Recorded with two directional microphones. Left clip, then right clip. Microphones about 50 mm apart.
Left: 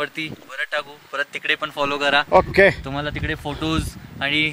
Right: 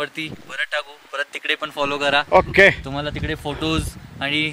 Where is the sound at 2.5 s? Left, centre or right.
Centre.